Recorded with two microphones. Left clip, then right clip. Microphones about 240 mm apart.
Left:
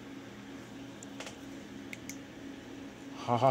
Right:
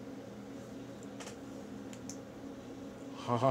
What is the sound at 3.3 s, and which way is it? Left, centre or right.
Speech, left.